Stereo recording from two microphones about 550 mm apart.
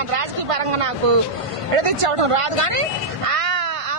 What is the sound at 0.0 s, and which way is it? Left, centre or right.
A woman's voice, right.